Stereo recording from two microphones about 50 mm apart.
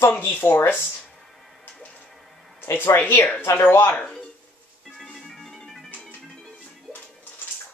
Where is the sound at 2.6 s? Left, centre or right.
Left.